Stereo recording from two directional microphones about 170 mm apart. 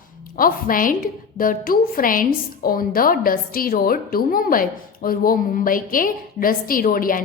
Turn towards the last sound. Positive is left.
turn(degrees=55)  # may be behind; listen again after turning